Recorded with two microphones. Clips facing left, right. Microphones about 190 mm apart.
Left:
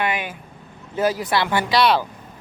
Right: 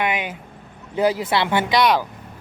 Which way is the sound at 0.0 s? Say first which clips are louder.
Right 1 dB; 20° right (ahead or behind).